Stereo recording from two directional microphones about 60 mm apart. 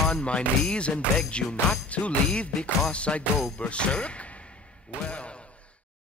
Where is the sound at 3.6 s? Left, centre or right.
Centre.